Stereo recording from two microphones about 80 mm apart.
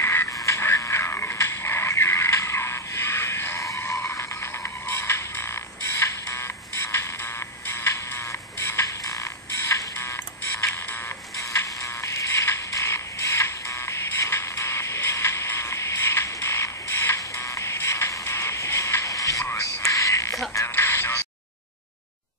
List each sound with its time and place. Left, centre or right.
0.0 s a sound: left
4.1 s music: left
11.3 s music: left
19.0 s music: left
19.4 s whispering: left
20.5 s music: left